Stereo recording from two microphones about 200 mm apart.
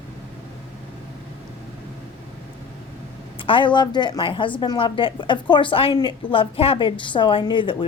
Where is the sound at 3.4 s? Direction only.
25° left (ahead or behind).